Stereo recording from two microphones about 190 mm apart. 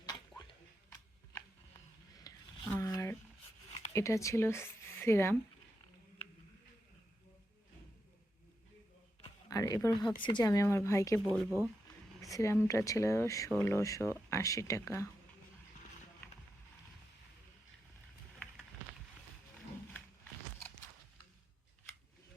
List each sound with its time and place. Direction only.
0.0 s a sound: 20° left (ahead or behind)
3.9 s speech: 15° left (ahead or behind)
9.5 s speech: 20° left (ahead or behind)
11.4 s speech: 10° right (ahead or behind)
12.2 s speech: 15° left (ahead or behind)